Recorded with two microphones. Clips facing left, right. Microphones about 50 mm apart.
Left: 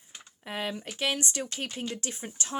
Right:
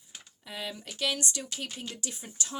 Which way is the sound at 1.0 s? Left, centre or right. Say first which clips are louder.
Left 1 dB; left.